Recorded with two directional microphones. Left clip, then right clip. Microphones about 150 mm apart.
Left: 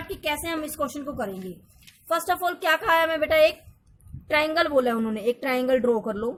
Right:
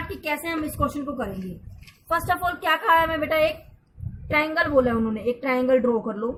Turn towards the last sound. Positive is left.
turn(degrees=60)  # may be behind; listen again after turning